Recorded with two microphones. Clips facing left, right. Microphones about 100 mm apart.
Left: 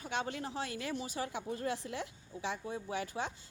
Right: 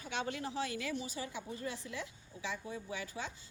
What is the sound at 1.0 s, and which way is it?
A woman's voice, 60° left (ahead or behind).